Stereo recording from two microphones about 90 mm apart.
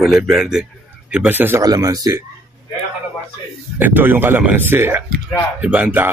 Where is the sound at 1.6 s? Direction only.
45° right (ahead or behind).